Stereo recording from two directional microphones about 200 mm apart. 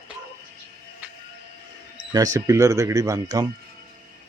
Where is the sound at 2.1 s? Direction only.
15° right (ahead or behind).